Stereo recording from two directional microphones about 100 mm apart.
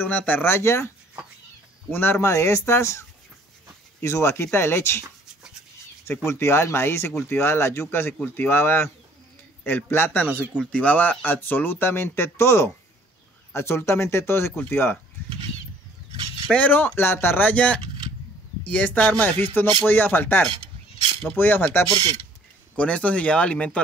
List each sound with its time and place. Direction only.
0.0 s speech: 15° left (ahead or behind)
6.2 s speech: 25° left (ahead or behind)
10.2 s speech: 15° right (ahead or behind)
10.6 s speech: 15° left (ahead or behind)
16.4 s speech: 15° left (ahead or behind)
21.8 s speech: 45° right (ahead or behind)
22.8 s speech: 10° left (ahead or behind)